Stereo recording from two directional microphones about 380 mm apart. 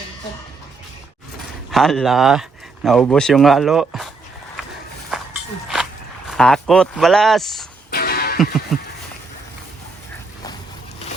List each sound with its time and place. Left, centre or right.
1.7 s speech: centre
5.6 s speech: centre
7.9 s music: left
8.7 s a sound: centre